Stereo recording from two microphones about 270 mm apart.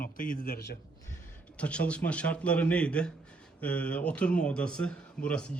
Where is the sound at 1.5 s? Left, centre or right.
Centre.